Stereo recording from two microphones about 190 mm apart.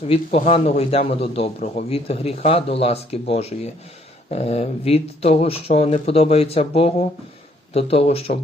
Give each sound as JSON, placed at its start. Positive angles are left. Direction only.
{"t": 0.1, "sound": "a man's voice", "side_deg": 35}